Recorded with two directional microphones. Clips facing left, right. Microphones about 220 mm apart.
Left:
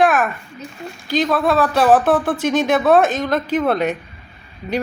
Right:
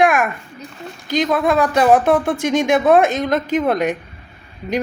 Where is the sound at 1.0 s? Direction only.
20° right (ahead or behind).